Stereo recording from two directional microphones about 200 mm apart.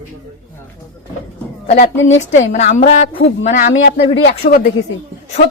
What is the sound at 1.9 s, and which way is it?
Speech, 70° left (ahead or behind).